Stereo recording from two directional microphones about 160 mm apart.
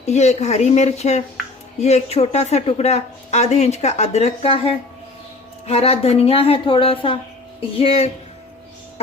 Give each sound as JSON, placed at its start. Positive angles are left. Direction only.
{"t": 0.0, "sound": "speech", "side_deg": 45}